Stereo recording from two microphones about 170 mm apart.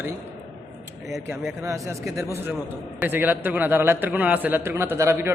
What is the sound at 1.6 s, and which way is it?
A man's voice, 20° right (ahead or behind).